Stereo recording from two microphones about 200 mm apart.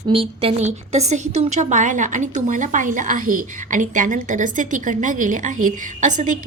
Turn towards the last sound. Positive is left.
turn(degrees=-40)  # may be behind; listen again after turning